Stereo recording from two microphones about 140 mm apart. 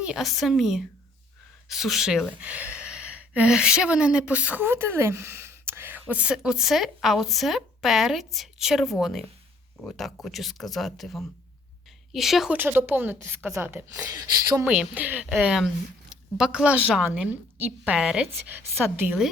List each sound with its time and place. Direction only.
0.0 s speech: centre (ahead or behind)
12.5 s speech: 15° right (ahead or behind)
14.7 s speech: 10° right (ahead or behind)